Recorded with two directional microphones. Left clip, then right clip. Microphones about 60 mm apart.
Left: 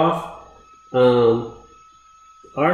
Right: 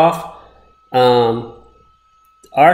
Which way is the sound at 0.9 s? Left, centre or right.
Right.